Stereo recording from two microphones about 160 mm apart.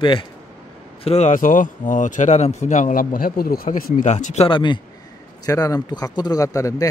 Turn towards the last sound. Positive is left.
turn(degrees=20)  # may be behind; listen again after turning